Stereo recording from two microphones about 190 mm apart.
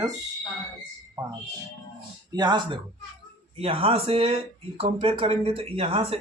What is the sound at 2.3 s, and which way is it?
Speech, 20° right (ahead or behind).